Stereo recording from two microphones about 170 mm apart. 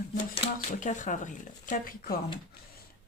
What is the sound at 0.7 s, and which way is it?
A woman's voice, 50° left (ahead or behind).